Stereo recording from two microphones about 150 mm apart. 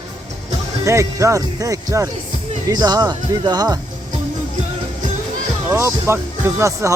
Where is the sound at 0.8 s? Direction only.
20° right (ahead or behind).